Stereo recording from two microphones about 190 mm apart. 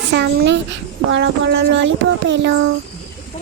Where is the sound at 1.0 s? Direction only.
70° right (ahead or behind).